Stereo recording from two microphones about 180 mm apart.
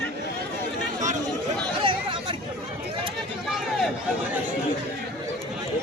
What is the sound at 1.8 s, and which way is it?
Chatter, 30° right (ahead or behind).